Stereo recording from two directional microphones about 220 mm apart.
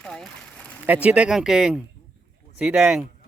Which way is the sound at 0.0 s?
5° left (ahead or behind).